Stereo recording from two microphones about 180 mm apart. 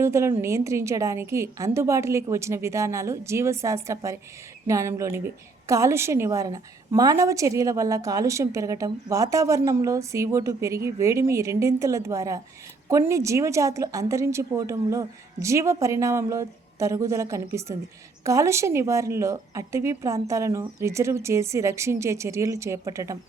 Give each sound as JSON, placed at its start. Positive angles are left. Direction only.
{"t": 0.0, "sound": "a woman's voice", "side_deg": -15}